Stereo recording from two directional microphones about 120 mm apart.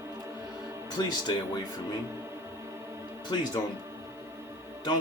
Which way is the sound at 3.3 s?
40° left (ahead or behind).